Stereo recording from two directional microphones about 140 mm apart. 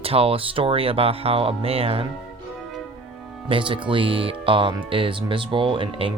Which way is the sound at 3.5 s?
35° right (ahead or behind).